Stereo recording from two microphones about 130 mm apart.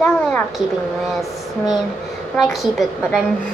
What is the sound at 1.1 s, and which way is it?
A woman's voice, centre (ahead or behind).